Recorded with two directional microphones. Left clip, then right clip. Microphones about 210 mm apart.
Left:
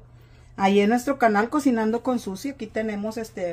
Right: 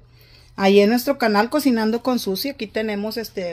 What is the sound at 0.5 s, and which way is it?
Speech, 50° right (ahead or behind).